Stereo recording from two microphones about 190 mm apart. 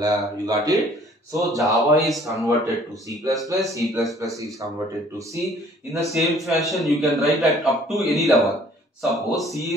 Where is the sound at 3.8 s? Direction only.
Centre (ahead or behind).